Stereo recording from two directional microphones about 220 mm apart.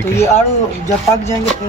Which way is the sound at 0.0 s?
10° left (ahead or behind).